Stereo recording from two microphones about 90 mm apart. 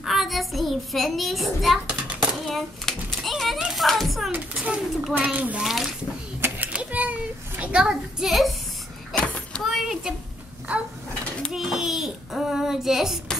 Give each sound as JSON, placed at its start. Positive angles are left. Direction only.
{"t": 0.0, "sound": "a child's voice", "side_deg": -5}
{"t": 2.4, "sound": "a sound", "side_deg": 0}
{"t": 4.3, "sound": "a child's voice", "side_deg": -15}
{"t": 5.6, "sound": "a child's voice", "side_deg": -5}
{"t": 6.4, "sound": "children playing", "side_deg": -15}
{"t": 9.1, "sound": "vehicle", "side_deg": 15}
{"t": 9.6, "sound": "a child's voice", "side_deg": 0}
{"t": 11.5, "sound": "a child's voice", "side_deg": -5}